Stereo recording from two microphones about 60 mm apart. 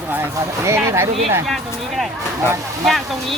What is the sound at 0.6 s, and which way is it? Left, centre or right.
Speech, right.